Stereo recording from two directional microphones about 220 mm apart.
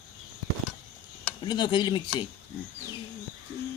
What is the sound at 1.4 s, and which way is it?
Speech, 20° left (ahead or behind).